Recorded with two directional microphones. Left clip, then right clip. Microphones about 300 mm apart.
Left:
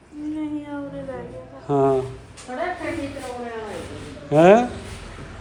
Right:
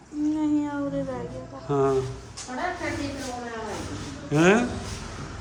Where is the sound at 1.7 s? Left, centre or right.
Centre.